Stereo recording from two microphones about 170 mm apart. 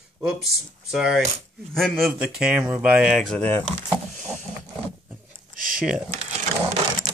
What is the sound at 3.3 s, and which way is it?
Speech, 10° left (ahead or behind).